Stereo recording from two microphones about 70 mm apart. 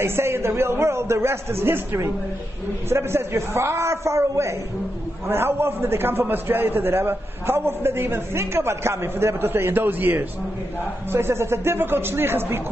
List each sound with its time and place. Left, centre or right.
0.0 s a man's voice: right